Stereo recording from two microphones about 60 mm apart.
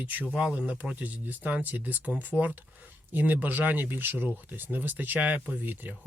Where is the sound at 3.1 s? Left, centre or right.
Right.